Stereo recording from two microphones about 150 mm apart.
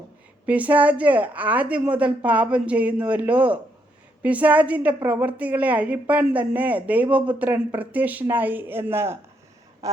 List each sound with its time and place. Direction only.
0.4 s a woman's voice: 10° right (ahead or behind)
9.8 s duck: 20° right (ahead or behind)